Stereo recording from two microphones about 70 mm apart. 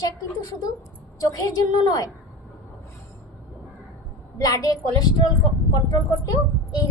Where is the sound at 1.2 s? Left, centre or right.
Left.